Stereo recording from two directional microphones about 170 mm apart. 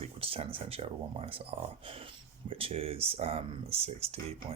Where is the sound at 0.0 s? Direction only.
35° right (ahead or behind).